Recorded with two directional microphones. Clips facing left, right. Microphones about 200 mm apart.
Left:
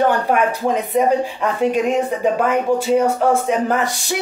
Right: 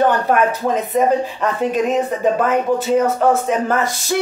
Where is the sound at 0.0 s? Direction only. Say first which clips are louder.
Right 1 dB; 10° left (ahead or behind).